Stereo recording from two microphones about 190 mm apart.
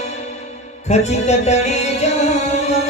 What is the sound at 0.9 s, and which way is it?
Music, 35° left (ahead or behind).